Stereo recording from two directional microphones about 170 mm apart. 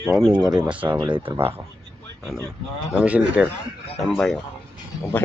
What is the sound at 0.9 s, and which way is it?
Speech, 30° right (ahead or behind).